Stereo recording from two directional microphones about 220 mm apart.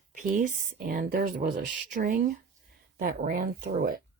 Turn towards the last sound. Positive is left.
turn(degrees=-45)  # may be behind; listen again after turning